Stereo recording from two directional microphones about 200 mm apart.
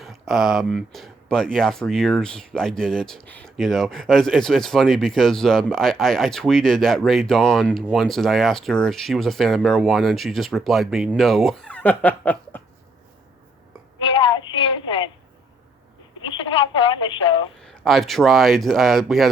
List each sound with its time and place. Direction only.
0.0 s speech: centre (ahead or behind)
14.0 s a sound: 25° left (ahead or behind)
16.2 s speech: 25° left (ahead or behind)
17.6 s speech: centre (ahead or behind)